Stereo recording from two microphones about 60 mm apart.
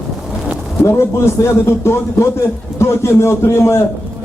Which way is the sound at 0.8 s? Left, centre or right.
Left.